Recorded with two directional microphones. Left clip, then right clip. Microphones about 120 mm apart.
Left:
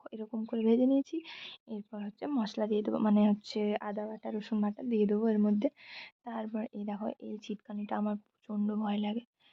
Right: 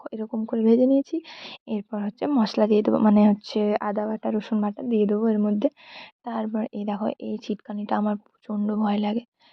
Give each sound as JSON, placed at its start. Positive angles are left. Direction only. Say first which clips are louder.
{"t": 0.0, "sound": "a sound", "louder": "right 10 dB", "side_deg": -35}
{"t": 0.3, "sound": "speech", "louder": "right 9 dB", "side_deg": -20}
{"t": 1.5, "sound": "a woman's voice", "louder": "right 12 dB", "side_deg": -55}
{"t": 4.5, "sound": "speech", "louder": "right 5 dB", "side_deg": -30}
{"t": 5.5, "sound": "speech", "louder": "right 8 dB", "side_deg": -30}